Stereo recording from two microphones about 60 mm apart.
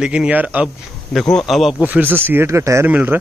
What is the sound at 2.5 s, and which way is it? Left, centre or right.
Speech, right.